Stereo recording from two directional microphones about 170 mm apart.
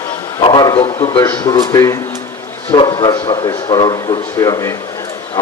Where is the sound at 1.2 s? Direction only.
20° left (ahead or behind).